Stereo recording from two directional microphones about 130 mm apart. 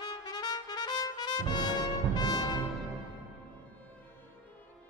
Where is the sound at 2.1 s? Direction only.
30° left (ahead or behind).